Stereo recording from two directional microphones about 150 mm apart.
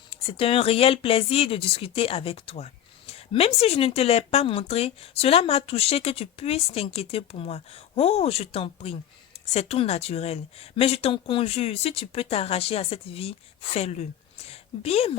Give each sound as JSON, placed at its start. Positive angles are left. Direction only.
{"t": 0.1, "sound": "a woman's voice", "side_deg": 40}